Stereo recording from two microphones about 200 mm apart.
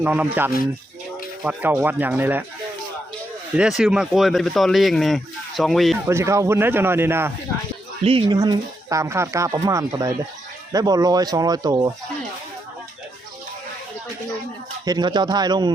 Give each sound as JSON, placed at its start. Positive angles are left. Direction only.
{"t": 0.0, "sound": "speech", "side_deg": -10}
{"t": 3.6, "sound": "speech", "side_deg": 0}
{"t": 6.1, "sound": "speech", "side_deg": -15}
{"t": 8.0, "sound": "speech", "side_deg": -25}
{"t": 14.8, "sound": "speech", "side_deg": -20}